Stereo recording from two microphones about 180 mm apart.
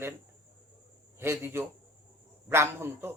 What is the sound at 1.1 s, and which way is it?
A man's voice, 15° right (ahead or behind).